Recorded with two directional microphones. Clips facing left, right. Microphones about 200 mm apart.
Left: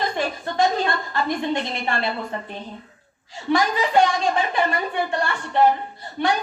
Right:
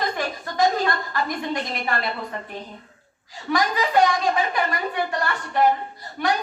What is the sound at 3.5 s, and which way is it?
A woman's voice, 25° left (ahead or behind).